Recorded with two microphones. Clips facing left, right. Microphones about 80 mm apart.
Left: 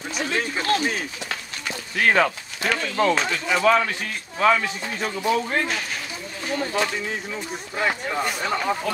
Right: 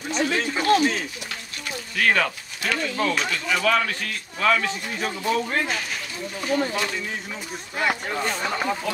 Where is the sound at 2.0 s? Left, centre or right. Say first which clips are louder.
Left 3 dB; centre.